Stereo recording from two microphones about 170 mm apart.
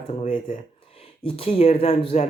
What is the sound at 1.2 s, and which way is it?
Speech, 35° left (ahead or behind).